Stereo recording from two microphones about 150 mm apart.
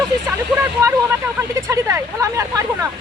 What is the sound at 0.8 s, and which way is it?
Speech, 20° right (ahead or behind).